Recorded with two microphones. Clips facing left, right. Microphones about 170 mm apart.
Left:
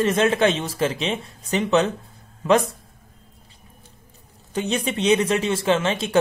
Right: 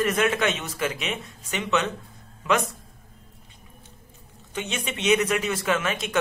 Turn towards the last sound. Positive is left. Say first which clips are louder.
# left 5 dB
turn(degrees=30)  # may be behind; listen again after turning